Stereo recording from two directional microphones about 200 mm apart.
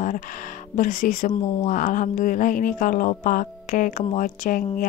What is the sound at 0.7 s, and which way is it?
A woman's voice, 40° left (ahead or behind).